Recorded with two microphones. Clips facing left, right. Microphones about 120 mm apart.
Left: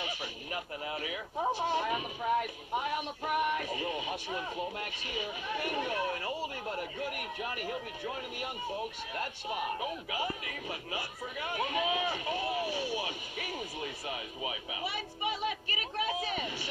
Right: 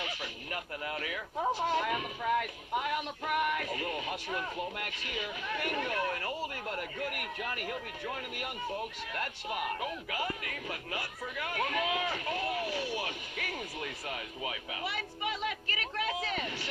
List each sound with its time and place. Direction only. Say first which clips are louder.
0.0 s speech: even; 20° left (ahead or behind)
9.8 s speech: even; 20° left (ahead or behind)